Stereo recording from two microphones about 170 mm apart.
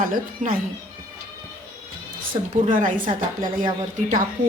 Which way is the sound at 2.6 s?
50° right (ahead or behind).